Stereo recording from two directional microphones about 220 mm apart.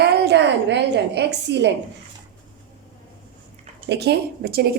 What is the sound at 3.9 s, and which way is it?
Speech, 50° right (ahead or behind).